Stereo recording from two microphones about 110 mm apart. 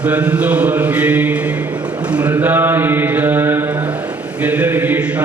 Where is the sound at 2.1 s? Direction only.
10° right (ahead or behind).